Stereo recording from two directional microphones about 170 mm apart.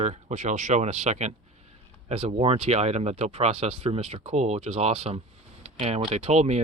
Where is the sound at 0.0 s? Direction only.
45° right (ahead or behind).